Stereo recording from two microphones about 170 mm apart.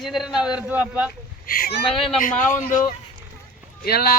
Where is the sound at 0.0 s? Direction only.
Centre (ahead or behind).